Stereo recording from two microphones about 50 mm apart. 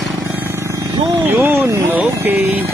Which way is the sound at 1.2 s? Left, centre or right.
Right.